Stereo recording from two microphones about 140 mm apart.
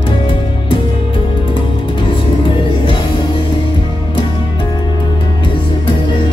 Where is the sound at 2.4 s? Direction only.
35° left (ahead or behind).